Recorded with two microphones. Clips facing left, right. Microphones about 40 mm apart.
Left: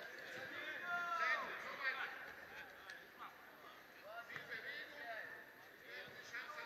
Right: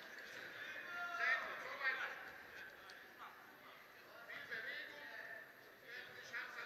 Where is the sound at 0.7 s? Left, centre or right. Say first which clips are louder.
Left 6 dB; left.